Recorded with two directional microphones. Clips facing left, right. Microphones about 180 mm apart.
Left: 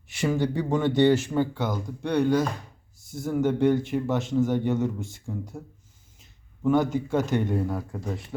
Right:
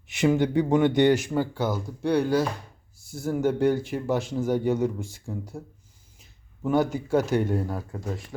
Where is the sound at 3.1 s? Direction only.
5° right (ahead or behind).